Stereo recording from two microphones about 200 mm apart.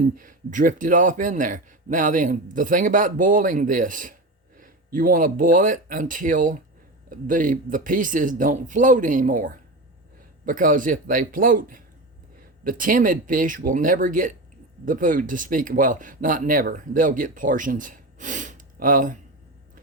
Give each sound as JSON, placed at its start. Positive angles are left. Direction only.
{"t": 0.2, "sound": "speech", "side_deg": -40}